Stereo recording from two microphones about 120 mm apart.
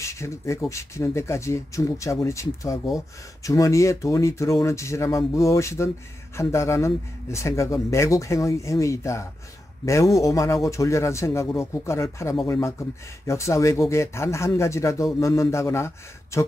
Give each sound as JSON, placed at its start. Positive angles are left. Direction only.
{"t": 0.0, "sound": "speech", "side_deg": 25}